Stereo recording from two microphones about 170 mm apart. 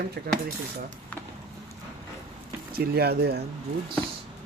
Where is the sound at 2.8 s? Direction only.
70° right (ahead or behind).